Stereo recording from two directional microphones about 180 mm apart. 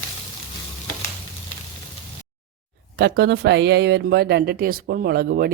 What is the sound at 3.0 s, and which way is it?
Speech, 65° right (ahead or behind).